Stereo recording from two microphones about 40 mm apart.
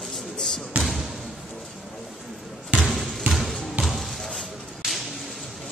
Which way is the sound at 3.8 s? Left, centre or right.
Centre.